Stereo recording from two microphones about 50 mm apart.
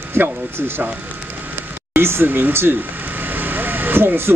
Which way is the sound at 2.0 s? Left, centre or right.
Right.